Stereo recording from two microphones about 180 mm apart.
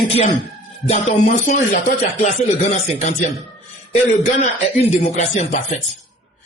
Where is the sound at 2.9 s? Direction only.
35° left (ahead or behind).